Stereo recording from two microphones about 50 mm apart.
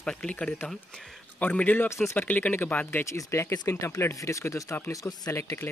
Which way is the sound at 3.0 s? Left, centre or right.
Left.